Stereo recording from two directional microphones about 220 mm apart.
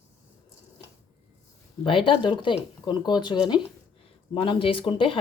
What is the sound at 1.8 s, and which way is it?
Speech, 25° left (ahead or behind).